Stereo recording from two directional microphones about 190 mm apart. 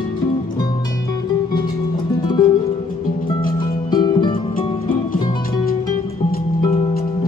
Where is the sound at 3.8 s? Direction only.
20° left (ahead or behind).